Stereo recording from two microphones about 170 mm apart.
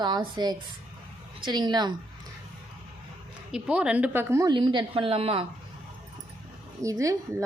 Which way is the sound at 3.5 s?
5° right (ahead or behind).